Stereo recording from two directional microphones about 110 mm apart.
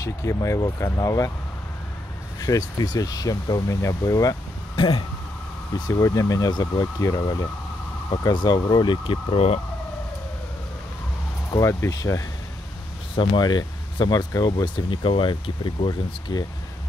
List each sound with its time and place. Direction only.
0.0 s speech: 30° left (ahead or behind)
2.4 s speech: 35° left (ahead or behind)
4.7 s speech: 50° left (ahead or behind)
5.9 s speech: 30° left (ahead or behind); by 9.6 s 60° left (ahead or behind)
11.5 s speech: 30° left (ahead or behind)
13.1 s speech: 50° left (ahead or behind)